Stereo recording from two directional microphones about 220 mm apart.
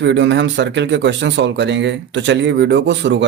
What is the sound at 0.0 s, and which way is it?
Speech, 55° right (ahead or behind).